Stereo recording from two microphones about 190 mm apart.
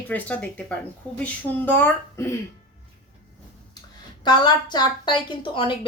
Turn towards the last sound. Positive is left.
turn(degrees=25)  # may be behind; listen again after turning